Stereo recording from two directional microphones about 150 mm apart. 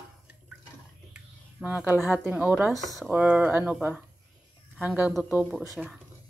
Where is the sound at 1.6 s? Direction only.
10° right (ahead or behind).